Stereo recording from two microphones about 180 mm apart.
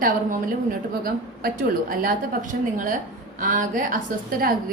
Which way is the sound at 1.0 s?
50° right (ahead or behind).